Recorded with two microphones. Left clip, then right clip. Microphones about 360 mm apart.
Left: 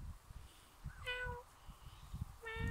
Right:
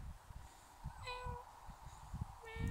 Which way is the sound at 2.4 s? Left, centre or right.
Left.